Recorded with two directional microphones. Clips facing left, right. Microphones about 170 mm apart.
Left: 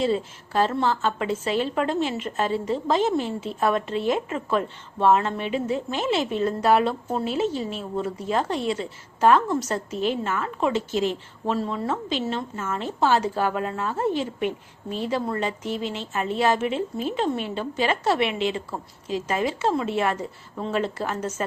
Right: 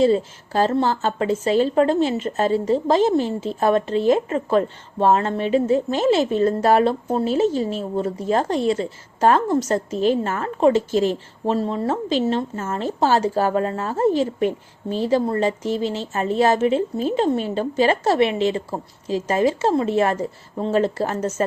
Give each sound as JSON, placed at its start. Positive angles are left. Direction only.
{"t": 0.0, "sound": "a woman's voice", "side_deg": -40}